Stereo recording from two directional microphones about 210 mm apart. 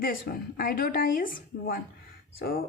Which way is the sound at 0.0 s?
45° left (ahead or behind).